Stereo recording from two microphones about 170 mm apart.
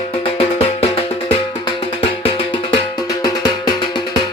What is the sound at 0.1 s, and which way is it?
Music, 35° left (ahead or behind).